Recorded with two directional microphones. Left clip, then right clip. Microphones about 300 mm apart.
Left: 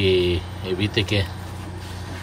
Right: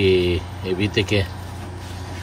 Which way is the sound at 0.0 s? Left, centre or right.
Left.